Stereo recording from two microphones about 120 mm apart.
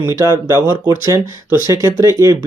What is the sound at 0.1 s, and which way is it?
Speech, 25° right (ahead or behind).